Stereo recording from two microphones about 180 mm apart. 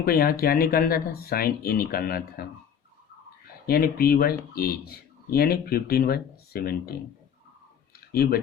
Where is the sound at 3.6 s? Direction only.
55° left (ahead or behind).